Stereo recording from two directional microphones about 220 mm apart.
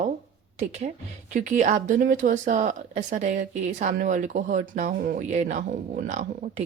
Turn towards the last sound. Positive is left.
turn(degrees=-35)  # may be behind; listen again after turning